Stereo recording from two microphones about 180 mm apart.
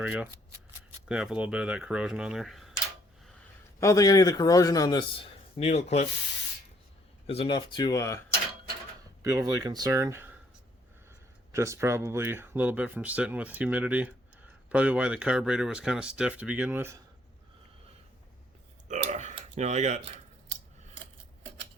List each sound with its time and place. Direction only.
0.0 s speech: 5° right (ahead or behind)
3.8 s a man's voice: 20° left (ahead or behind); by 6.1 s 35° left (ahead or behind)
7.3 s a man's voice: 30° left (ahead or behind)
9.2 s speech: 20° right (ahead or behind)
11.5 s speech: 15° right (ahead or behind)
18.9 s burping: 40° right (ahead or behind)
19.4 s speech: 40° right (ahead or behind)